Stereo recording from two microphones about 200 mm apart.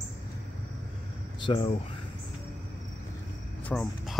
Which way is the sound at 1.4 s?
25° left (ahead or behind).